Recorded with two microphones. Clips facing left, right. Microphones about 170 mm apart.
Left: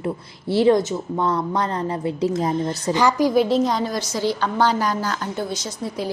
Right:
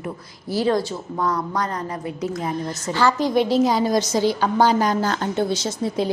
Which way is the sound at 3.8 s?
20° right (ahead or behind).